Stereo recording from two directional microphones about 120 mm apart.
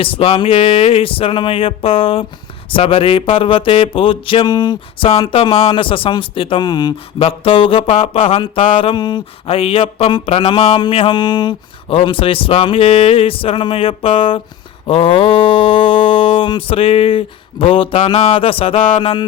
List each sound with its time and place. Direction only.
0.0 s speech: 50° left (ahead or behind)
7.2 s speech: 50° left (ahead or behind)